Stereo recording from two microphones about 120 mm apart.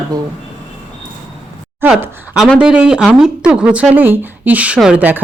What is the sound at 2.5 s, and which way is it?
Speech, 5° right (ahead or behind).